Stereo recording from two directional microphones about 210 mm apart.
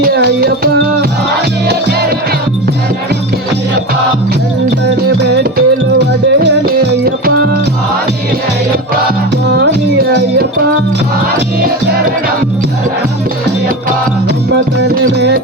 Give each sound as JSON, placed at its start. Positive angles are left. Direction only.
{"t": 0.0, "sound": "music", "side_deg": -45}
{"t": 5.3, "sound": "music", "side_deg": -50}
{"t": 6.7, "sound": "music", "side_deg": -45}
{"t": 14.5, "sound": "music", "side_deg": -55}